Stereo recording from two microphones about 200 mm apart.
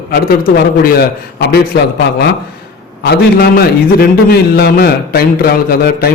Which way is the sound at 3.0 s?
50° left (ahead or behind).